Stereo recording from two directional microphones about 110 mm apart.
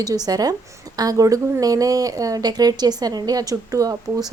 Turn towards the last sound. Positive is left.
turn(degrees=-35)  # may be behind; listen again after turning